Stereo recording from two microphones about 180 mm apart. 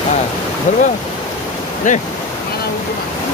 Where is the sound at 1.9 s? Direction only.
45° left (ahead or behind).